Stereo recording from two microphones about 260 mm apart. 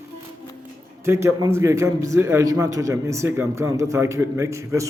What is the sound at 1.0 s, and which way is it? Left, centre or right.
A man's voice, centre.